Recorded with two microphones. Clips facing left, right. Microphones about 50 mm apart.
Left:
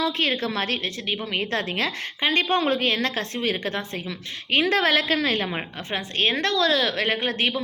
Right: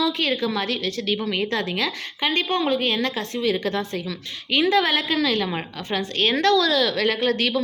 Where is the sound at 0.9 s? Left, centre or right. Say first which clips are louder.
Right 4 dB; left.